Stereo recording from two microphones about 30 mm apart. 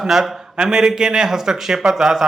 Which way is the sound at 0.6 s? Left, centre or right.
Right.